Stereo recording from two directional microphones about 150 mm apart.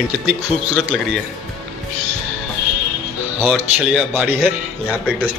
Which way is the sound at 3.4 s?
5° right (ahead or behind).